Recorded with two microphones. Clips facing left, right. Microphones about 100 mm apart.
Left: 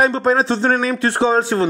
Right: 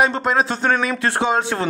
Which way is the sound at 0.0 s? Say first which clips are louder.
Left 2 dB; 35° left (ahead or behind).